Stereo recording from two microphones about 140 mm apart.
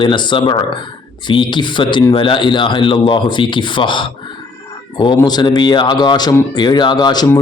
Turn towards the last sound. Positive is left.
turn(degrees=30)  # may be behind; listen again after turning